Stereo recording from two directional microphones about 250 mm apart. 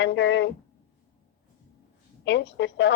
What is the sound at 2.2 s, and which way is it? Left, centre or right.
Speech, left.